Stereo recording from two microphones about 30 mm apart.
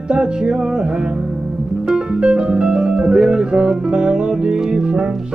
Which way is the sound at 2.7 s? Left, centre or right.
Right.